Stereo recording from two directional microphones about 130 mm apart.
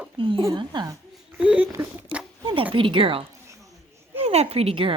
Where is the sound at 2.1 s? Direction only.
45° right (ahead or behind).